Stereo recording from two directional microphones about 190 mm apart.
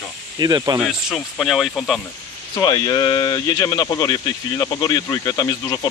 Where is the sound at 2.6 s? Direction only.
20° left (ahead or behind).